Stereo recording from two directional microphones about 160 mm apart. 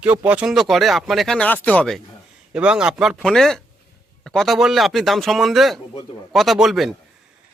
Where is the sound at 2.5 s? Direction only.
5° right (ahead or behind).